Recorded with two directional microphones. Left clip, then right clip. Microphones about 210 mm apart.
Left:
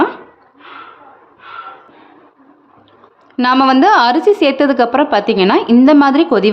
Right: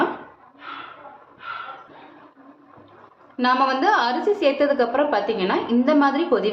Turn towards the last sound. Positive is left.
turn(degrees=55)  # may be behind; listen again after turning